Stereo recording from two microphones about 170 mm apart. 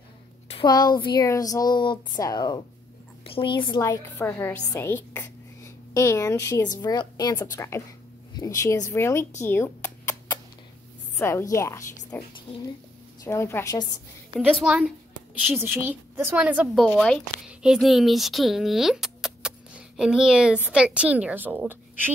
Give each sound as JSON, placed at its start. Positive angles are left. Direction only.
{"t": 0.5, "sound": "a woman's voice", "side_deg": 25}
{"t": 3.8, "sound": "a woman's voice", "side_deg": 15}
{"t": 9.4, "sound": "a sound", "side_deg": 15}
{"t": 11.2, "sound": "a woman's voice", "side_deg": 15}
{"t": 14.5, "sound": "a woman's voice", "side_deg": -5}